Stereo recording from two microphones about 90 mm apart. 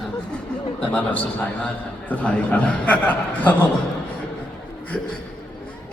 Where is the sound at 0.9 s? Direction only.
15° left (ahead or behind).